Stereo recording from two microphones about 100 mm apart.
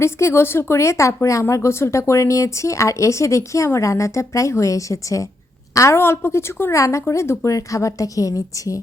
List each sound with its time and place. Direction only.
0.0 s a woman's voice: 25° left (ahead or behind)